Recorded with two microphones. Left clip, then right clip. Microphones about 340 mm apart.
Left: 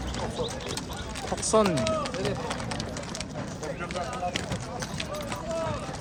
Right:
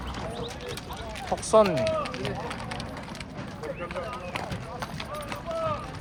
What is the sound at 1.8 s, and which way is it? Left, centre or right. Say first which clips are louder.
Run: even; centre.